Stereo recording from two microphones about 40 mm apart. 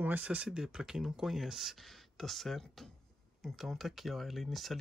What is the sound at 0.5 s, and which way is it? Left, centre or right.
Speech, centre.